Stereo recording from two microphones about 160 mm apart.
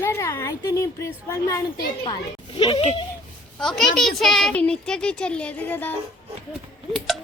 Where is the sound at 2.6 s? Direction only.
30° left (ahead or behind).